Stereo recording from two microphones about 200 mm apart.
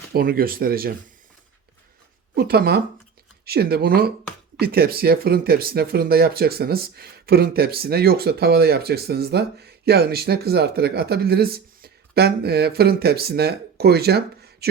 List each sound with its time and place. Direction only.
0.1 s speech: 45° right (ahead or behind)
2.3 s speech: 50° right (ahead or behind)